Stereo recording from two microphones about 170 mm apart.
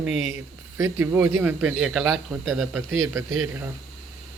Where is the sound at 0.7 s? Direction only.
15° right (ahead or behind).